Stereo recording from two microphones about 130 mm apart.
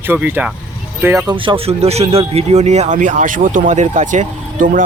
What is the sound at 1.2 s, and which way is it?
Speech, 40° right (ahead or behind).